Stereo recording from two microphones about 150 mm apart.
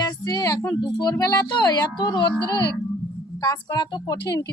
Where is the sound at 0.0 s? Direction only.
25° left (ahead or behind).